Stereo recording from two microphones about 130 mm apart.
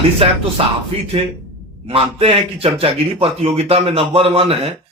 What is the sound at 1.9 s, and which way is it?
A man's voice, 45° right (ahead or behind).